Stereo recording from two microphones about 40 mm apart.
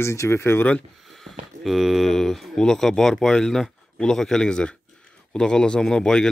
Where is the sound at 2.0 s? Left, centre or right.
Centre.